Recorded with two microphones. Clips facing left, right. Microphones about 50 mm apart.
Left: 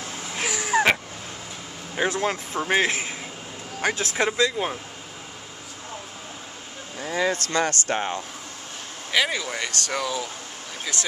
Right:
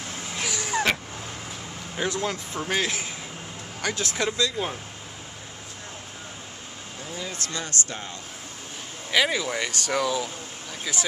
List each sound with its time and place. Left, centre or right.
0.4 s vehicle: centre
2.0 s speech: left
7.0 s a sound: left
7.5 s speech: left
9.1 s speech: centre